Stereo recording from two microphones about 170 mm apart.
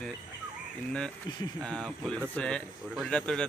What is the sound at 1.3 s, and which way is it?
Speech, 25° left (ahead or behind).